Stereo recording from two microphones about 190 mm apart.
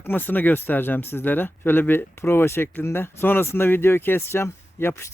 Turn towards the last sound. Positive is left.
turn(degrees=15)  # may be behind; listen again after turning